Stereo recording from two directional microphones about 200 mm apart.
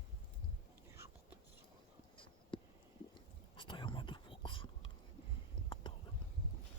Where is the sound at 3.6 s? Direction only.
25° left (ahead or behind).